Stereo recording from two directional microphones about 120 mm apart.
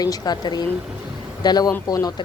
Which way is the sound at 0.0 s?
35° left (ahead or behind).